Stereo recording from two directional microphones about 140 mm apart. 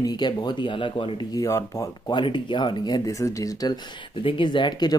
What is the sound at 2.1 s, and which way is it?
Speech, 35° left (ahead or behind).